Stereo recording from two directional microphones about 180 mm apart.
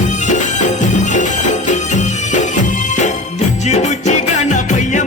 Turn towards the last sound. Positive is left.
turn(degrees=45)  # may be behind; listen again after turning